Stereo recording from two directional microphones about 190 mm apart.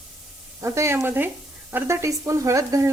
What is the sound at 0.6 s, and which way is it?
Speech, 15° right (ahead or behind).